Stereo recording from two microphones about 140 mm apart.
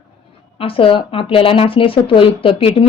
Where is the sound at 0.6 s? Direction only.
40° left (ahead or behind).